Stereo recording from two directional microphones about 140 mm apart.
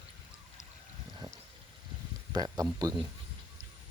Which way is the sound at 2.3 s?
30° right (ahead or behind).